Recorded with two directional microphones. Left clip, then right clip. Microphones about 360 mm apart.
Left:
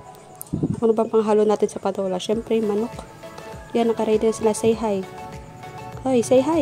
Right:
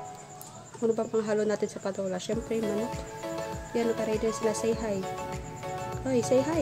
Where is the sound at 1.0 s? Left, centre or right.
Centre.